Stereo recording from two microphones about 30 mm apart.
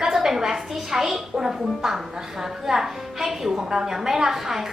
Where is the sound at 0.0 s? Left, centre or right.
Centre.